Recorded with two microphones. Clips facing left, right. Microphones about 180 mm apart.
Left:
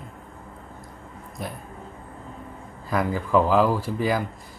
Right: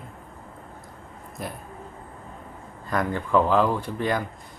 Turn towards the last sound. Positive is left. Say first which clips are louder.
# left 2 dB
turn(degrees=5)  # may be behind; listen again after turning